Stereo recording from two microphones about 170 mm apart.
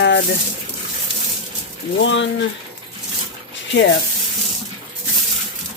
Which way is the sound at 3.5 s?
90° left.